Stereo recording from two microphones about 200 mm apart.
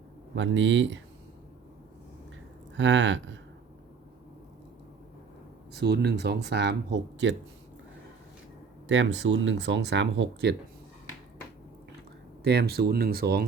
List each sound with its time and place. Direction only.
0.3 s speech: 65° right (ahead or behind)
2.7 s speech: 65° right (ahead or behind)
5.7 s speech: 55° right (ahead or behind)
8.9 s speech: 65° right (ahead or behind)
12.4 s speech: 55° right (ahead or behind)